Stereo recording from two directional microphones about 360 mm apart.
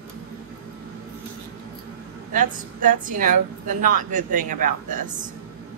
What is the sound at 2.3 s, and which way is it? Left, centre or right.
A woman's voice, right.